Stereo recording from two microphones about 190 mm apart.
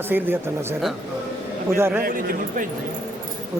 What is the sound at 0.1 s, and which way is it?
A man's voice, 10° right (ahead or behind).